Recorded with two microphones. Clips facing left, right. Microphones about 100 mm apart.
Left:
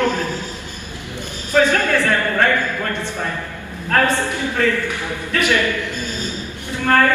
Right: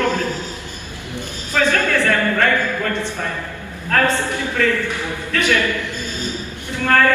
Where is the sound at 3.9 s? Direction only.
20° left (ahead or behind).